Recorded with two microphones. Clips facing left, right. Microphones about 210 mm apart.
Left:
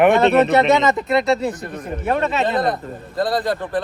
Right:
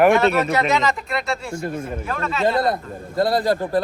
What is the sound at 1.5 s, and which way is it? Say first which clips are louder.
Speech: right 2 dB; 25° right (ahead or behind).